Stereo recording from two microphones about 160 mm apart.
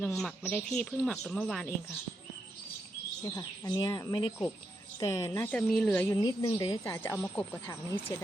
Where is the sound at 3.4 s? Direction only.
20° left (ahead or behind).